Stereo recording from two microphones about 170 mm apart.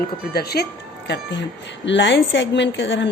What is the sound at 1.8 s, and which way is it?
A woman's voice, 90° left.